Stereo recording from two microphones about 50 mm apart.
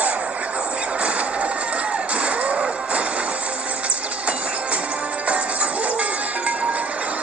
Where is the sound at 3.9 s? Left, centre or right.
Right.